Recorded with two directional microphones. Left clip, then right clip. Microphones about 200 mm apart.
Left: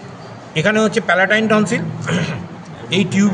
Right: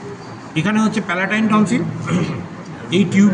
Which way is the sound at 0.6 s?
55° left (ahead or behind).